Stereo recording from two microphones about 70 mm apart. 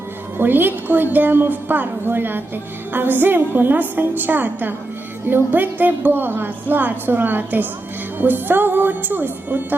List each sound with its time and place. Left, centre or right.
0.3 s a woman's voice: right